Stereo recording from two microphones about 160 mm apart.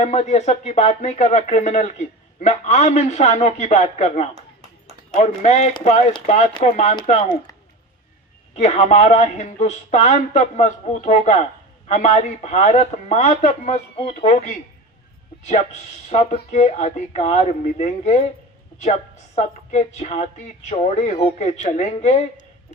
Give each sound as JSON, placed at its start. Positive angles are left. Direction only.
{"t": 0.0, "sound": "speech", "side_deg": 45}
{"t": 8.5, "sound": "speech", "side_deg": 45}
{"t": 10.9, "sound": "speech", "side_deg": 55}
{"t": 16.0, "sound": "speech", "side_deg": 40}